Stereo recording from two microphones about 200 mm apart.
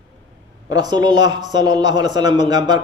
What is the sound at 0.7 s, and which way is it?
A man's voice, 20° right (ahead or behind).